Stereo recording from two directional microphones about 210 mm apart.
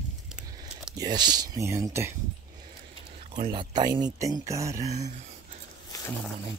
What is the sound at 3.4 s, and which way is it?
Speech, 25° right (ahead or behind).